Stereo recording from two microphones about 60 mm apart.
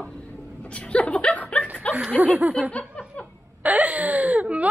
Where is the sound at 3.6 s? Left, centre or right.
Right.